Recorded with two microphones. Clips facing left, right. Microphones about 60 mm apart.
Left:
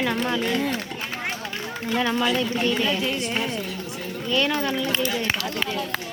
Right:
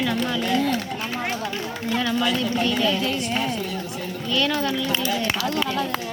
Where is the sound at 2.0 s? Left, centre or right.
Left.